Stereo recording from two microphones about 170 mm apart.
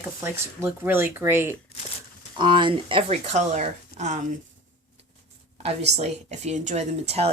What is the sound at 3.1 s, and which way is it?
Speech, 45° right (ahead or behind).